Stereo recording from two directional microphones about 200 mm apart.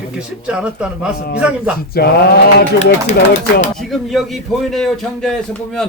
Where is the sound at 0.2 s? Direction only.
5° right (ahead or behind).